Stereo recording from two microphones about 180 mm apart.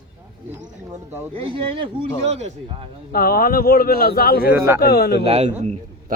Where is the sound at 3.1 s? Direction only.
55° left (ahead or behind).